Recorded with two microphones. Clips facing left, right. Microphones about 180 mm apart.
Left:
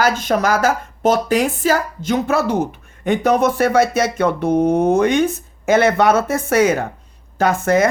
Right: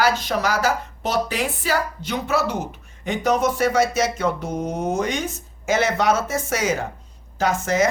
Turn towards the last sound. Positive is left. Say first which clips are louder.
# left 5 dB
turn(degrees=55)  # may be behind; listen again after turning